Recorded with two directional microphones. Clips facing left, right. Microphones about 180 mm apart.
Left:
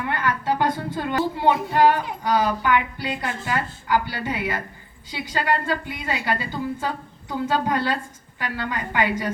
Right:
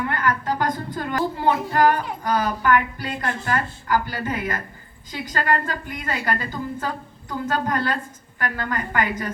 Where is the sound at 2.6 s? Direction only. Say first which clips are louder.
Right 2 dB; 45° right (ahead or behind).